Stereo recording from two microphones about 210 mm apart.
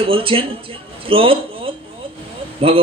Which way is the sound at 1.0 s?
25° right (ahead or behind).